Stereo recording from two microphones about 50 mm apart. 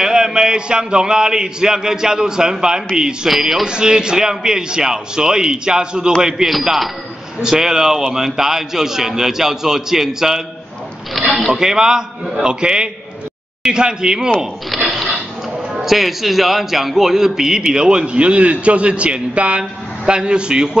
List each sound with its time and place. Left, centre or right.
0.0 s a man's voice: centre
3.6 s a man's voice: centre
14.4 s a sound: centre
15.7 s a man's voice: centre